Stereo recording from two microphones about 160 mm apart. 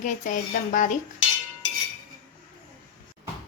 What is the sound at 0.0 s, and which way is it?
Speech, 55° left (ahead or behind).